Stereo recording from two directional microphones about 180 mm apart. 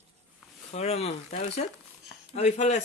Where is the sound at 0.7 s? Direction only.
35° left (ahead or behind).